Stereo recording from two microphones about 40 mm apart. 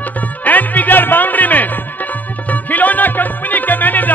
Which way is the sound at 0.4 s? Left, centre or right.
Left.